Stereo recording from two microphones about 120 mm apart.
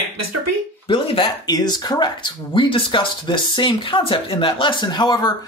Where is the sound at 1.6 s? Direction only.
35° left (ahead or behind).